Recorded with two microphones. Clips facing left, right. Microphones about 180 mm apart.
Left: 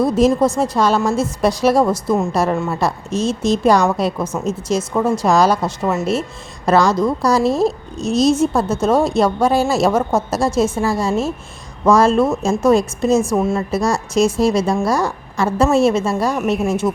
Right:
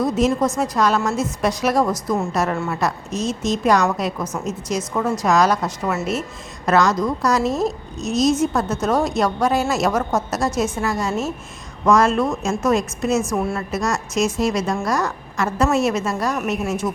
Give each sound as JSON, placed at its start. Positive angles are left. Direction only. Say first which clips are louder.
{"t": 0.0, "sound": "a woman's voice", "louder": "left 4 dB", "side_deg": 35}